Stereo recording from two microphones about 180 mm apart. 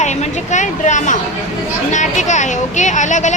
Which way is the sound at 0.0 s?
40° left (ahead or behind).